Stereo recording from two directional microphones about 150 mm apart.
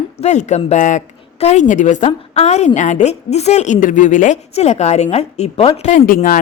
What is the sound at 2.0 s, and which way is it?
A woman's voice, 45° left (ahead or behind).